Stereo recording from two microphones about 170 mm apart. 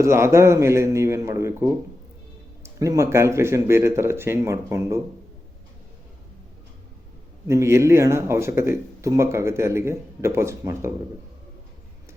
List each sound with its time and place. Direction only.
0.0 s speech: 15° right (ahead or behind)
7.4 s speech: 15° right (ahead or behind)